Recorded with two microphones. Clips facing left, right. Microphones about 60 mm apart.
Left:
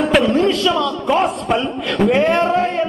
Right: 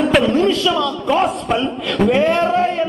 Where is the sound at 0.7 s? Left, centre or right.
Centre.